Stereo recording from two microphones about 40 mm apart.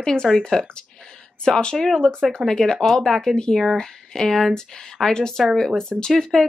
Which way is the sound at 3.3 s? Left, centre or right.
Centre.